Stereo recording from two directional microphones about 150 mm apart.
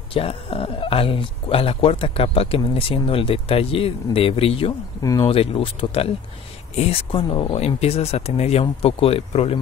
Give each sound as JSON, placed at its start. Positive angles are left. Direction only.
{"t": 0.1, "sound": "speech", "side_deg": 40}
{"t": 5.0, "sound": "speech", "side_deg": 25}
{"t": 5.3, "sound": "speech", "side_deg": 40}